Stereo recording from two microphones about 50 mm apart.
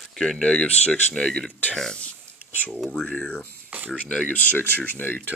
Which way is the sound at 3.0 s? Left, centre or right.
Left.